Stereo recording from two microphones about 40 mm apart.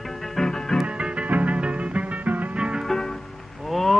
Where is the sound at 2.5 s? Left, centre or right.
Right.